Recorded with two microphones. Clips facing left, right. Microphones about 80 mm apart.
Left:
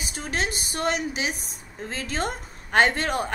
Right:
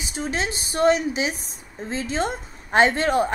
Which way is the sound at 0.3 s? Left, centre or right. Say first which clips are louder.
Left 1 dB; right.